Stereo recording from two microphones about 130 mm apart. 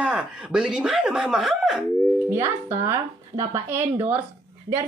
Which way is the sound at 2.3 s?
20° right (ahead or behind).